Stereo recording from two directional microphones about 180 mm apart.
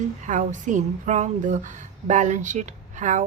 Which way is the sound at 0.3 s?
45° right (ahead or behind).